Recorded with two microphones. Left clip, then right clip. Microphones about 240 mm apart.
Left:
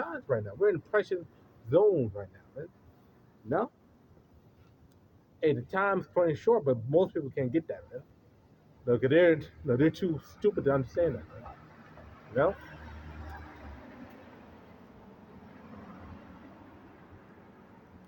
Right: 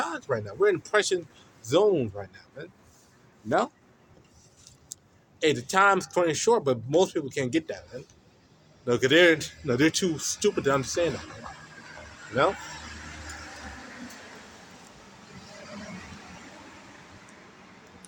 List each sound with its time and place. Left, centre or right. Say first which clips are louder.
0.0 s speech: right 3 dB; centre
5.4 s speech: right 6 dB; centre
8.9 s speech: right 4 dB; centre